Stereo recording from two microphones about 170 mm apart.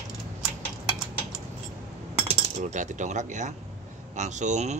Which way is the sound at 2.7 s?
45° right (ahead or behind).